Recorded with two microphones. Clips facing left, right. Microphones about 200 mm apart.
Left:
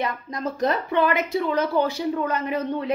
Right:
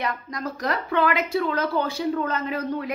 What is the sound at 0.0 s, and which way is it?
A woman's voice, 25° left (ahead or behind).